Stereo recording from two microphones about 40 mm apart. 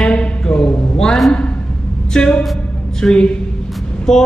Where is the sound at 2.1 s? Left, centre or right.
Left.